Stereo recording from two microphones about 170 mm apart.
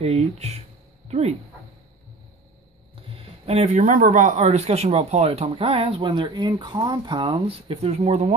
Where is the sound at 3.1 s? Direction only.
35° right (ahead or behind).